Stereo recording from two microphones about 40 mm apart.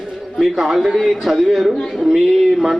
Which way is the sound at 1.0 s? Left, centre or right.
Centre.